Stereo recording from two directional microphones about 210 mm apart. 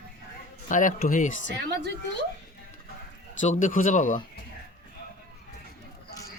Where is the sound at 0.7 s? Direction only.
40° left (ahead or behind).